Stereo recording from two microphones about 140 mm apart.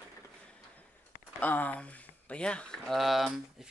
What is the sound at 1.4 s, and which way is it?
Speech, 10° left (ahead or behind).